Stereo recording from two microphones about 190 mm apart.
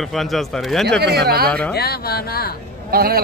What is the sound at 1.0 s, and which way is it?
Speech, 55° right (ahead or behind).